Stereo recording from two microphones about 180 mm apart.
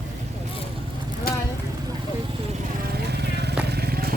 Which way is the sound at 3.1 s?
65° right (ahead or behind).